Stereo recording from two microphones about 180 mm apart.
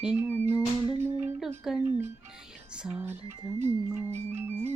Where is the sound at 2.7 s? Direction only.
5° right (ahead or behind).